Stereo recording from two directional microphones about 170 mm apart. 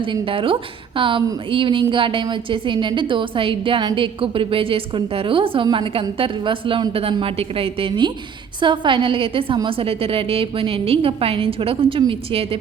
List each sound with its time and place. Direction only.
0.0 s a woman's voice: 30° right (ahead or behind)